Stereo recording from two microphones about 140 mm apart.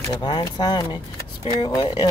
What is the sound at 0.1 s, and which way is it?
Speech, 30° left (ahead or behind).